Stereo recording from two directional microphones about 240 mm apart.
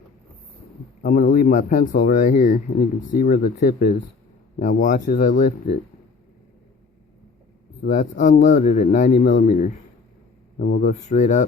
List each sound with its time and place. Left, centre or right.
1.0 s a man's voice: left
7.9 s a man's voice: left